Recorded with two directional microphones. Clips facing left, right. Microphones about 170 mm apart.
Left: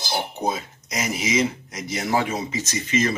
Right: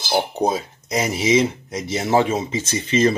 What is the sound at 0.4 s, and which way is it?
Speech, 30° right (ahead or behind).